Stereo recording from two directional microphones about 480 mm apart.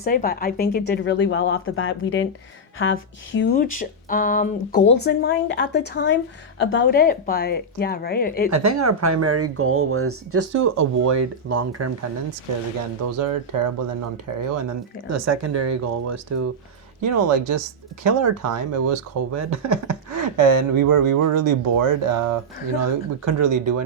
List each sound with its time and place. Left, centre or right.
0.0 s speech: centre
8.4 s speech: right
13.2 s speech: right